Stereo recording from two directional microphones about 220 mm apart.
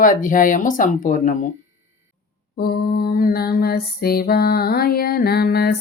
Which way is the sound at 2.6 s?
45° left (ahead or behind).